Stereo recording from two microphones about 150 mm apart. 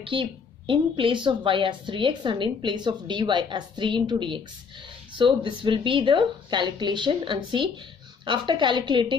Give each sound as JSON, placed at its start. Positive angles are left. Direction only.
{"t": 0.0, "sound": "a woman's voice", "side_deg": -35}